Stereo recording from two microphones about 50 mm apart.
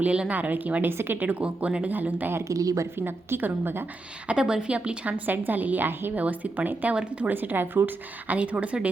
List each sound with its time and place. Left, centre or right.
0.0 s a woman's voice: right
0.9 s a woman's voice: right
1.2 s speech: right
2.4 s speech: right
2.9 s a woman's voice: right
4.3 s a woman's voice: centre
5.2 s speech: right
6.1 s a woman's voice: right
7.3 s speech: right
8.4 s a woman's voice: right